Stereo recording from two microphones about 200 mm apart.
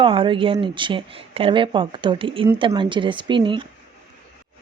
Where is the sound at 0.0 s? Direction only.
25° right (ahead or behind).